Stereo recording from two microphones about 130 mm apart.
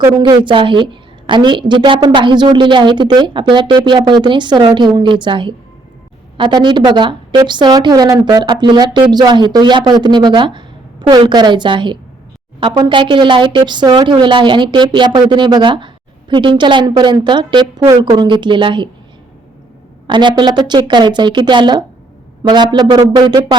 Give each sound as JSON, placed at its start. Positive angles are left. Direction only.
{"t": 0.2, "sound": "a woman's voice", "side_deg": -35}
{"t": 20.1, "sound": "a woman's voice", "side_deg": -35}